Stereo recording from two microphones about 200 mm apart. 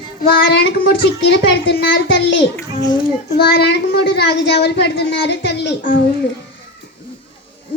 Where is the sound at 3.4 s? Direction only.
55° left (ahead or behind).